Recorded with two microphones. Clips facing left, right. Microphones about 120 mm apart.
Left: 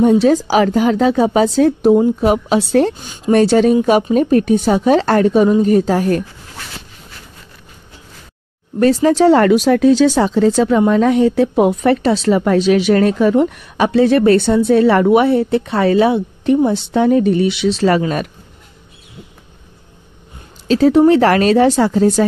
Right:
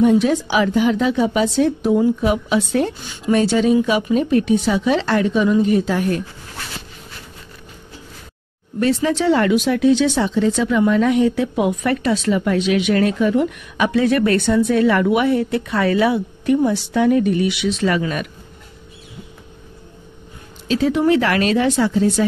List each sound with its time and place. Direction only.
0.0 s a woman's voice: 35° left (ahead or behind)
8.7 s speech: 40° left (ahead or behind)
20.6 s speech: 40° left (ahead or behind)